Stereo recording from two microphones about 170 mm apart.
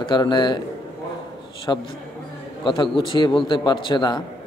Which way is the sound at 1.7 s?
20° left (ahead or behind).